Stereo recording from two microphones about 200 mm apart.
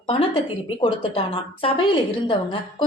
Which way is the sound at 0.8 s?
30° left (ahead or behind).